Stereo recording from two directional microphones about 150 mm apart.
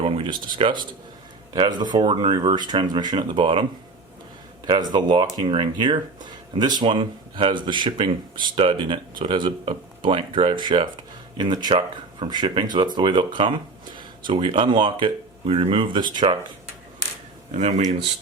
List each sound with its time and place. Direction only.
0.0 s a sound: 35° right (ahead or behind)
1.9 s speech: 30° right (ahead or behind)
17.5 s speech: 50° right (ahead or behind)